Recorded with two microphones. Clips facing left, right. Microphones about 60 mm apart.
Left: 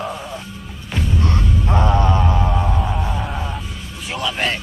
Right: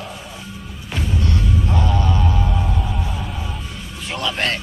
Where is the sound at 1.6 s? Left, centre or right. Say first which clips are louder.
Left 7 dB; left.